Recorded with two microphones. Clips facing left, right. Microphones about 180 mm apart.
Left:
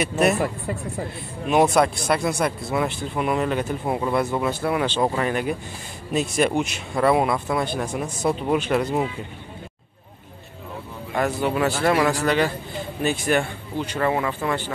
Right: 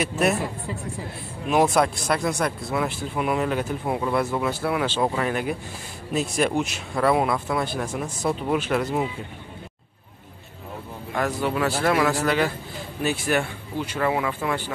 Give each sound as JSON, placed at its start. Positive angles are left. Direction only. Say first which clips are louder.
{"t": 1.5, "sound": "speech", "louder": "left 2 dB", "side_deg": 0}
{"t": 11.1, "sound": "speech", "louder": "left 2 dB", "side_deg": 5}